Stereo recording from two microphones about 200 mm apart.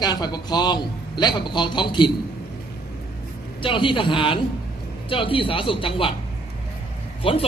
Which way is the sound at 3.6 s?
25° left (ahead or behind).